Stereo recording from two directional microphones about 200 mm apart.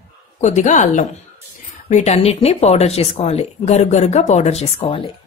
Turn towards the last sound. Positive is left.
turn(degrees=25)  # may be behind; listen again after turning